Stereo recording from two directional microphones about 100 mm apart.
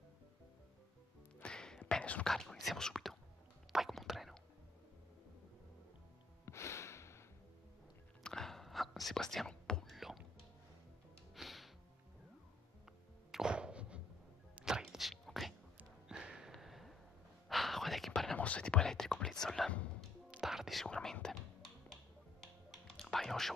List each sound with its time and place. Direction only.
1.4 s music: 10° left (ahead or behind)
1.9 s whispering: 10° left (ahead or behind)
6.4 s music: 30° left (ahead or behind)
8.2 s whispering: 5° left (ahead or behind)
11.3 s music: centre (ahead or behind)
13.3 s music: 10° right (ahead or behind)
15.8 s a sound: 10° right (ahead or behind)
17.5 s whispering: centre (ahead or behind)
20.2 s whispering: 5° right (ahead or behind)
22.4 s music: centre (ahead or behind)